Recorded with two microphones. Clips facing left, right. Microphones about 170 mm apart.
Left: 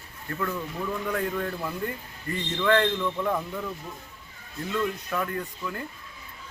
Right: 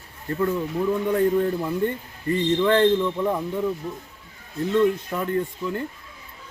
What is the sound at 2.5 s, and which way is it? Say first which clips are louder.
Speech: right 4 dB; 30° right (ahead or behind).